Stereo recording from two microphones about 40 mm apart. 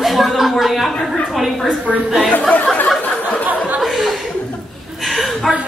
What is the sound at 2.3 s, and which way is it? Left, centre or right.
Speech, left.